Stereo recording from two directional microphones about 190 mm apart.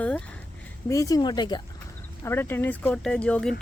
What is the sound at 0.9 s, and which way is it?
Speech, 15° left (ahead or behind).